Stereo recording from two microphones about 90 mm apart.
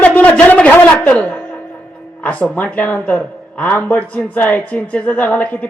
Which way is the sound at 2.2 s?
15° left (ahead or behind).